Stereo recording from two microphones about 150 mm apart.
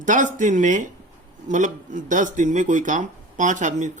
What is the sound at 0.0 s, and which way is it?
Speech, 60° right (ahead or behind).